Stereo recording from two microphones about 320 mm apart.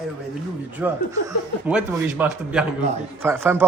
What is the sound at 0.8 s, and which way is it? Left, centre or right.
Speech, centre.